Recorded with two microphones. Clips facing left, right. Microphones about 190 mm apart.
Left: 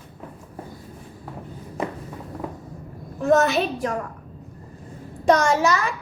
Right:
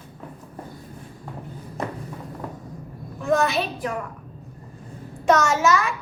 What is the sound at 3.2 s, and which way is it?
Speech, 40° left (ahead or behind).